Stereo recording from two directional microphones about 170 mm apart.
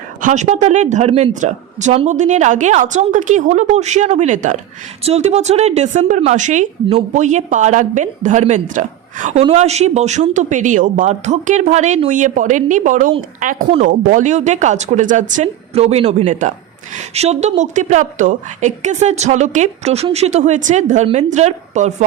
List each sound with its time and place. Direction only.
0.2 s speech: 45° right (ahead or behind)